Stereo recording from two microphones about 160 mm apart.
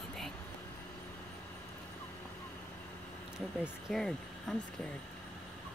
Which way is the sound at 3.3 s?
Centre (ahead or behind).